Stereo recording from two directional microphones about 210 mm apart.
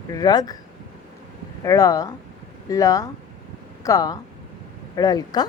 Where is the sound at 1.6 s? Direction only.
15° left (ahead or behind).